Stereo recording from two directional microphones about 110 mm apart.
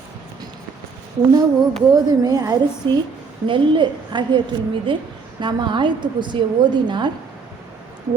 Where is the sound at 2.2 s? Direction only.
35° right (ahead or behind).